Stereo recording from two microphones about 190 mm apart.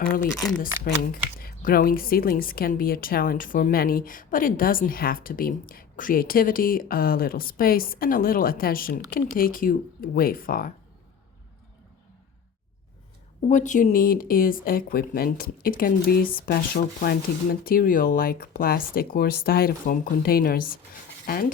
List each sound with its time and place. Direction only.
1.4 s a woman's voice: 50° left (ahead or behind)
13.5 s a woman's voice: 40° left (ahead or behind)